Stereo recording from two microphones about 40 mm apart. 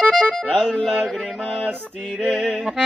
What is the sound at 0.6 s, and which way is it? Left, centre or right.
Speech, centre.